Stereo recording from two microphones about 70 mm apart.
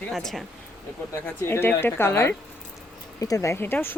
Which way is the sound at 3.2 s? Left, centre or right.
Left.